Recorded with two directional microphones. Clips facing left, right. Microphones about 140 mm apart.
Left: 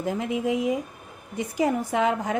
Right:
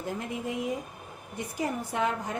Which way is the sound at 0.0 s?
90° left.